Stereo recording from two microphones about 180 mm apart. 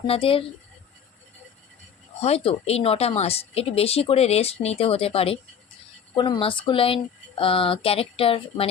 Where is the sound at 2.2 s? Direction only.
35° left (ahead or behind).